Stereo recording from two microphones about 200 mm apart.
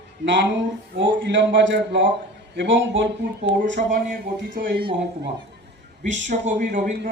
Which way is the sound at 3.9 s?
45° right (ahead or behind).